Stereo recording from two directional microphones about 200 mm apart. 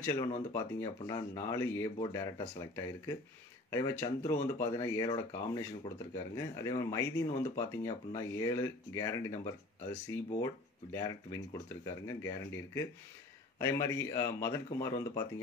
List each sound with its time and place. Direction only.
0.0 s speech: 15° left (ahead or behind)